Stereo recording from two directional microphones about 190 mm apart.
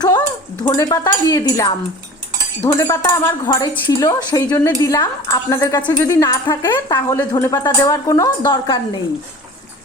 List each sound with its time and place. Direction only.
0.6 s speech: 15° left (ahead or behind)